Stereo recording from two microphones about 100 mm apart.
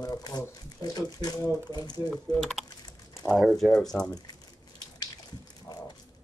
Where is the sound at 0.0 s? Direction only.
40° left (ahead or behind).